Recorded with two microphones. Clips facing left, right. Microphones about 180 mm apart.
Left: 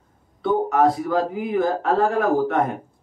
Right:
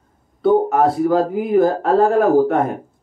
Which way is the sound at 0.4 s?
45° right (ahead or behind).